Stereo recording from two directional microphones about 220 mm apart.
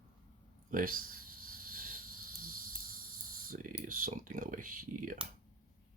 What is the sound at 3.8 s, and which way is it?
Speech, 40° right (ahead or behind).